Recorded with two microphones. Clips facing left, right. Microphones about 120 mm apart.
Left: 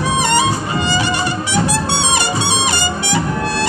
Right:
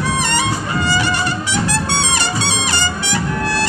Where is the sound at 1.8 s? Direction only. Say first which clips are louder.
Left 2 dB; 15° left (ahead or behind).